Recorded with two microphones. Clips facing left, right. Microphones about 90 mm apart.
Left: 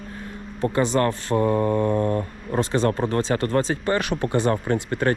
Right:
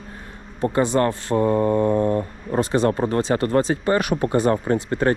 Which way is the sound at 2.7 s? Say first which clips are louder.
Right 2 dB; 45° right (ahead or behind).